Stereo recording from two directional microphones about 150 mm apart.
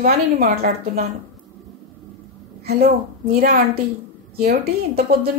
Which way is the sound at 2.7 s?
90° right.